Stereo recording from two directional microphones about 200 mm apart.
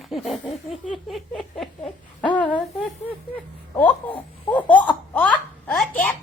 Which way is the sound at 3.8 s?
5° left (ahead or behind).